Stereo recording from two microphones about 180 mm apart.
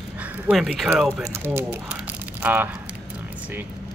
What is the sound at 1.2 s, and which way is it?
Speech, 15° right (ahead or behind).